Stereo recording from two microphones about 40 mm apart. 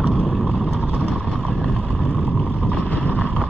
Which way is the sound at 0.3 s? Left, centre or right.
Centre.